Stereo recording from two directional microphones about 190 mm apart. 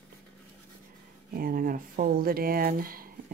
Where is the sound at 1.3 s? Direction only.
50° right (ahead or behind).